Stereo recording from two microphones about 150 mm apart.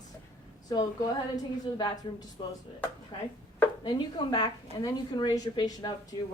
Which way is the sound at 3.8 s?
30° left (ahead or behind).